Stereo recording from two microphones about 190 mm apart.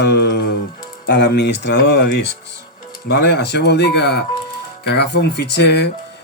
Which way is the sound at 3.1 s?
60° left (ahead or behind).